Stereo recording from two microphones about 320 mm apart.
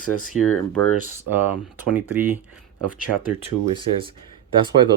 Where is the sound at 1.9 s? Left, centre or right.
Centre.